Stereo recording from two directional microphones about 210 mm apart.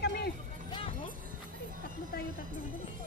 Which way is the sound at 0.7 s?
25° left (ahead or behind).